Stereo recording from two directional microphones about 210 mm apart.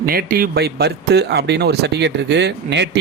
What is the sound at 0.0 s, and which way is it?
Speech, 45° right (ahead or behind).